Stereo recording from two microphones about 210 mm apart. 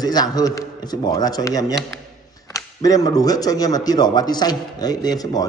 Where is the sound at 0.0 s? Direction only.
20° left (ahead or behind).